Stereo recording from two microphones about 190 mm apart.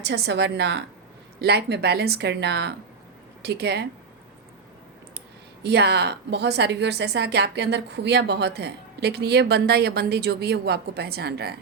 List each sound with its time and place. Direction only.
0.0 s a woman's voice: 65° right (ahead or behind)
5.6 s a woman's voice: 60° right (ahead or behind)